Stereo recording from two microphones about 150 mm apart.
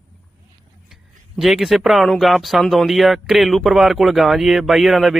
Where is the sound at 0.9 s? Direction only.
5° right (ahead or behind).